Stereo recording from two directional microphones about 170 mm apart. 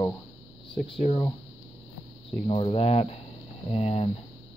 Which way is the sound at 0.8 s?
35° left (ahead or behind).